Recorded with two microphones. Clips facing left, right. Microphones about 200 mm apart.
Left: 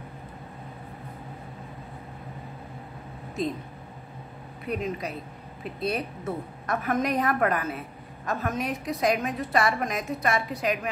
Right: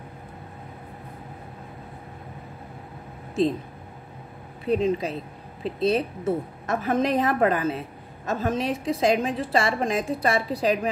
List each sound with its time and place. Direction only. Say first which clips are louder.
4.6 s a woman's voice: right 7 dB; 30° right (ahead or behind)